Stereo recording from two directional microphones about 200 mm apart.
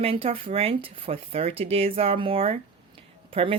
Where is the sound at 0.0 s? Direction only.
30° right (ahead or behind).